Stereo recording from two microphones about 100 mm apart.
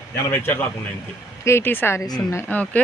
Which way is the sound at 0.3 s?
20° left (ahead or behind).